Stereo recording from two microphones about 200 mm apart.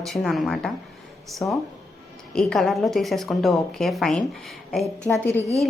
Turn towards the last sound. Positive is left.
turn(degrees=30)  # may be behind; listen again after turning